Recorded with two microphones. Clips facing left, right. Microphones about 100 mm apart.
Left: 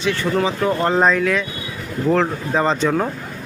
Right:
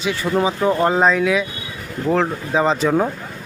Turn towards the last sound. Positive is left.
turn(degrees=-5)  # may be behind; listen again after turning